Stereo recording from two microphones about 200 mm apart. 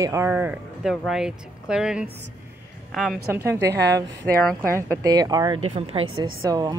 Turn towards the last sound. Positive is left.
turn(degrees=-20)  # may be behind; listen again after turning